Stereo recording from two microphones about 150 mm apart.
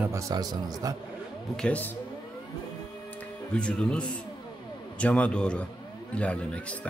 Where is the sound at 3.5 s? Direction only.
5° left (ahead or behind).